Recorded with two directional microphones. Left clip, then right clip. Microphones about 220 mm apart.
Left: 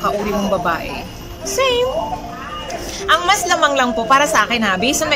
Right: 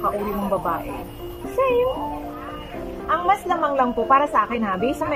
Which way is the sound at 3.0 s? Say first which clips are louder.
Left 5 dB; centre (ahead or behind).